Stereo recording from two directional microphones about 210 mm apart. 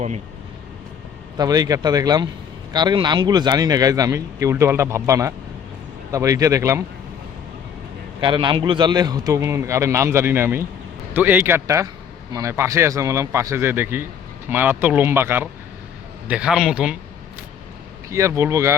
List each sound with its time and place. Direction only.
1.4 s speech: 15° right (ahead or behind)
8.2 s a man's voice: 25° right (ahead or behind); by 17.0 s 5° right (ahead or behind)
18.1 s speech: 15° right (ahead or behind)